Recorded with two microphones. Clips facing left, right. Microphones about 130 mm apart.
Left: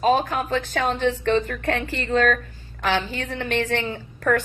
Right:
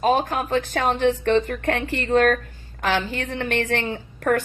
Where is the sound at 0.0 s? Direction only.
45° right (ahead or behind).